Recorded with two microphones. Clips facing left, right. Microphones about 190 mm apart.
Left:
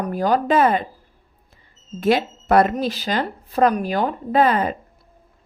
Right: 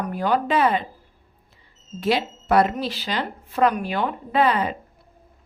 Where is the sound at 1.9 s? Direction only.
50° left (ahead or behind).